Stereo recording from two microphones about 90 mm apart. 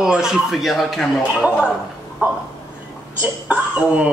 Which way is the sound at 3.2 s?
15° right (ahead or behind).